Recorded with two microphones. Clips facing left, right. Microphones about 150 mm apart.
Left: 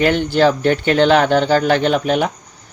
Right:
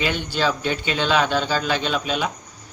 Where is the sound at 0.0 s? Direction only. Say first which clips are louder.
Left 9 dB; 55° left (ahead or behind).